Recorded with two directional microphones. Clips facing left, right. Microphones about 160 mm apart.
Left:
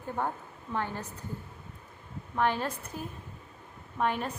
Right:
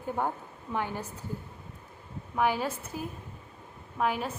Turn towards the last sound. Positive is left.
turn(degrees=-5)  # may be behind; listen again after turning